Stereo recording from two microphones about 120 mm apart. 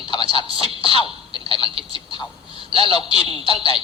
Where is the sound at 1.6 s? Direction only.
50° right (ahead or behind).